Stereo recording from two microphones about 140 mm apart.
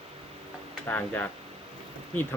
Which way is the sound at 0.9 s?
15° left (ahead or behind).